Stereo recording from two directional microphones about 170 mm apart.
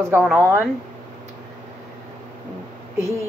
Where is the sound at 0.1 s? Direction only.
15° right (ahead or behind).